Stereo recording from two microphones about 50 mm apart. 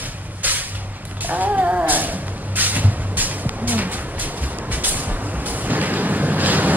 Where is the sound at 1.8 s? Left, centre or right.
Right.